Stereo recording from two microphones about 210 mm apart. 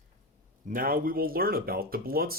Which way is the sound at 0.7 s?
40° right (ahead or behind).